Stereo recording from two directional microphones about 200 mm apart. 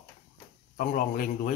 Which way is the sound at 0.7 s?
40° left (ahead or behind).